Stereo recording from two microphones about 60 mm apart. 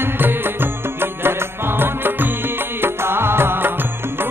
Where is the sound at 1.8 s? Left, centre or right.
Right.